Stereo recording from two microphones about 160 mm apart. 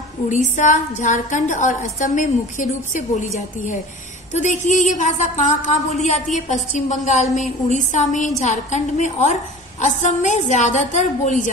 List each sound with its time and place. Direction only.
0.3 s a woman's voice: 50° left (ahead or behind)
4.3 s a woman's voice: 50° left (ahead or behind)